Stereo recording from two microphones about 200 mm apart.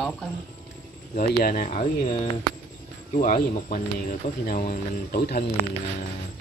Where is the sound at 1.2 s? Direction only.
40° left (ahead or behind).